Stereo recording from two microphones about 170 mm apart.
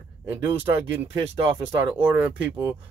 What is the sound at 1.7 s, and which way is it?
Speech, 10° right (ahead or behind).